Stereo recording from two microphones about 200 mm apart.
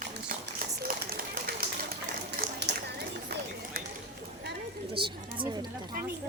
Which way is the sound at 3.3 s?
50° right (ahead or behind).